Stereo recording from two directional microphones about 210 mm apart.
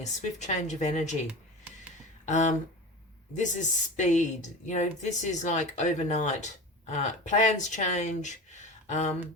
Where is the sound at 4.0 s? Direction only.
35° left (ahead or behind).